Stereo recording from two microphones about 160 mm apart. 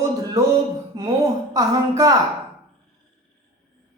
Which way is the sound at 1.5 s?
20° right (ahead or behind).